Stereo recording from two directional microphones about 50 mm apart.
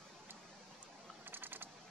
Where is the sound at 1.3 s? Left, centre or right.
Right.